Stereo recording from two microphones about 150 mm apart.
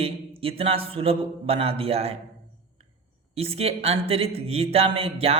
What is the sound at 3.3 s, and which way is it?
Speech, 40° right (ahead or behind).